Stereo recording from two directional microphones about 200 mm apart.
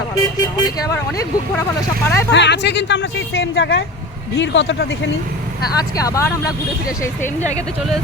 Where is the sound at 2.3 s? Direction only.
60° left (ahead or behind).